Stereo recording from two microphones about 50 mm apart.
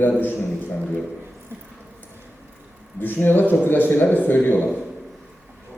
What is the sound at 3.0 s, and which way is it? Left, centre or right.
A man's voice, left.